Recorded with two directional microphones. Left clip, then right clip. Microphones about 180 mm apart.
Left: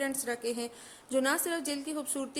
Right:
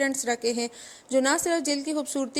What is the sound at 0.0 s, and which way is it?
A woman's voice, 30° right (ahead or behind).